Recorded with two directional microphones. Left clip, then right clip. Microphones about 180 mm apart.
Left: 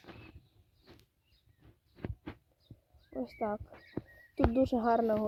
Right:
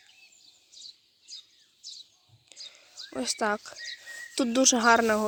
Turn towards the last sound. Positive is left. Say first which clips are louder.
# right 7 dB
turn(degrees=-15)  # may be behind; listen again after turning